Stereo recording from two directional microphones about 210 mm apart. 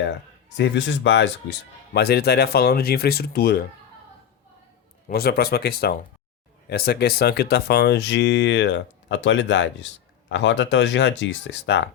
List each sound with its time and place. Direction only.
0.5 s speech: 60° left (ahead or behind)
5.0 s speech: 45° left (ahead or behind)